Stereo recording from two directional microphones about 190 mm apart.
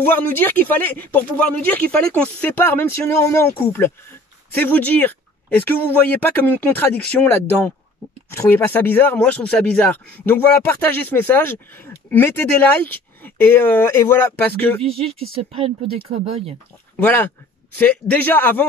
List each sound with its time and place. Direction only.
0.0 s speech: 10° left (ahead or behind)
14.8 s speech: 30° right (ahead or behind)
16.9 s speech: 10° left (ahead or behind)